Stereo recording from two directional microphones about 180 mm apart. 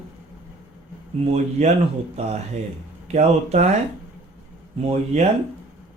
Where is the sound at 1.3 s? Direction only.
35° right (ahead or behind).